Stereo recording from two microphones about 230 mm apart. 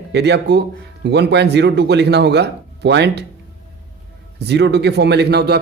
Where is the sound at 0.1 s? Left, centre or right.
Right.